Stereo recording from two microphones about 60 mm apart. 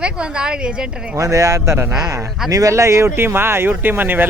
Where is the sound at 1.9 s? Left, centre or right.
Right.